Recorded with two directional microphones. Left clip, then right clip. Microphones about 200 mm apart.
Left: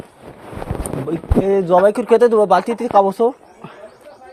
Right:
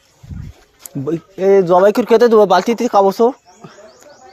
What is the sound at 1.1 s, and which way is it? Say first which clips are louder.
Speech: right 4 dB; 55° right (ahead or behind).